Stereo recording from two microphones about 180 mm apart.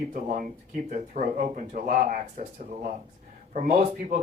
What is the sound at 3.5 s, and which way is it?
Speech, 45° right (ahead or behind).